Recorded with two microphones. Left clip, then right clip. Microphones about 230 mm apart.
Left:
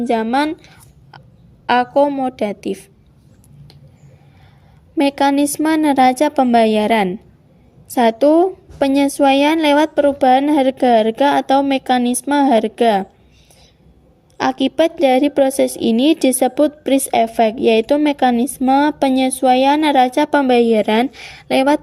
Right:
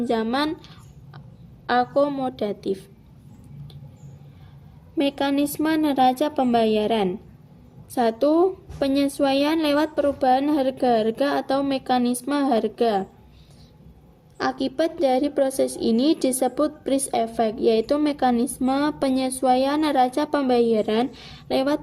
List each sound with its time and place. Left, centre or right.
0.0 s a woman's voice: left
4.9 s a woman's voice: left
14.8 s a woman's voice: left